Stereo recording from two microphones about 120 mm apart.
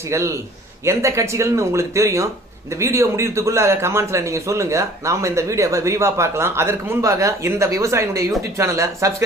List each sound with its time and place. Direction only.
0.1 s speech: 20° right (ahead or behind)